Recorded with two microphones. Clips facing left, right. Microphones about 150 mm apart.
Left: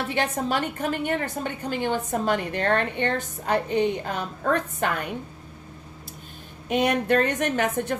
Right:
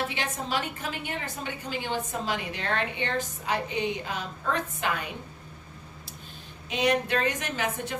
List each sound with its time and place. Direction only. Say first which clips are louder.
0.1 s a woman's voice: left 6 dB; 50° left (ahead or behind)
6.7 s a woman's voice: left 4 dB; 50° left (ahead or behind)